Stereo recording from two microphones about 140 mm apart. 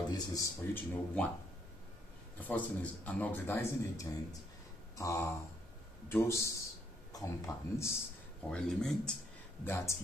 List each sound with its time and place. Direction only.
0.1 s a man's voice: 25° left (ahead or behind)
2.4 s a man's voice: 10° left (ahead or behind)
8.5 s speech: 5° left (ahead or behind)
9.7 s a man's voice: 15° left (ahead or behind)